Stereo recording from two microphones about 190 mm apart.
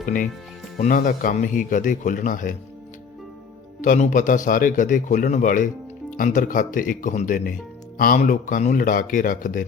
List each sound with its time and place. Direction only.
0.0 s a man's voice: 45° left (ahead or behind)
3.8 s a man's voice: 40° left (ahead or behind)